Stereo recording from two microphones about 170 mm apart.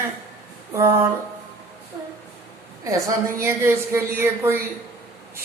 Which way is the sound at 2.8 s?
20° right (ahead or behind).